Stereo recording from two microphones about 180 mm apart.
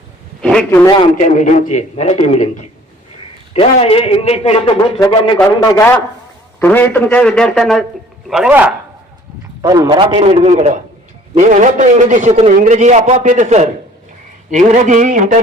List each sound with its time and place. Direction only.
0.4 s a man's voice: 5° left (ahead or behind)
1.1 s speech: 45° left (ahead or behind)
5.4 s a man's voice: 15° left (ahead or behind); by 8.7 s 5° right (ahead or behind)
9.6 s a man's voice: 20° right (ahead or behind); by 15.4 s 45° right (ahead or behind)